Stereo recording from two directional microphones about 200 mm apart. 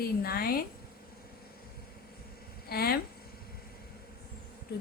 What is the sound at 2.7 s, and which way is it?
Speech, 50° left (ahead or behind).